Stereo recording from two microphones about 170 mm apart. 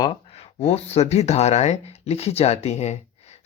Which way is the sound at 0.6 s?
40° left (ahead or behind).